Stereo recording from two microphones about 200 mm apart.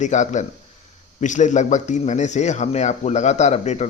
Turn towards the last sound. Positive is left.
turn(degrees=35)  # may be behind; listen again after turning